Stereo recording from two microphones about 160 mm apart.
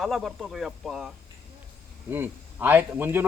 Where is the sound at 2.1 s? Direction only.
10° right (ahead or behind).